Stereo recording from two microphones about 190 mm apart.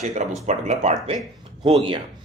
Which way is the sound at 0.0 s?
35° right (ahead or behind).